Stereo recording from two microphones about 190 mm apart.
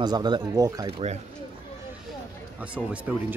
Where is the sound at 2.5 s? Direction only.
5° right (ahead or behind).